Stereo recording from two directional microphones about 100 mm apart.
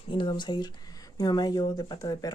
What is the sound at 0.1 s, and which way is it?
Speech, 55° left (ahead or behind).